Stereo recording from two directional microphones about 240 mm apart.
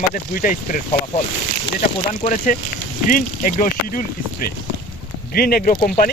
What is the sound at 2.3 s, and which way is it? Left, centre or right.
Speech, left.